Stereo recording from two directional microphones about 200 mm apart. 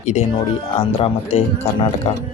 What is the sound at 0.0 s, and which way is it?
Speech, 35° left (ahead or behind).